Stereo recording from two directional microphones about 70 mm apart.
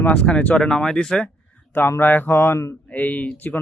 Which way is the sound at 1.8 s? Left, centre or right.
Left.